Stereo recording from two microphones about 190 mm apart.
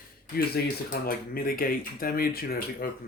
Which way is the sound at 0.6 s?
55° left (ahead or behind).